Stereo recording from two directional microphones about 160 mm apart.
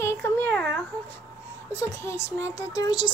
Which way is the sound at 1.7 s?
90° right.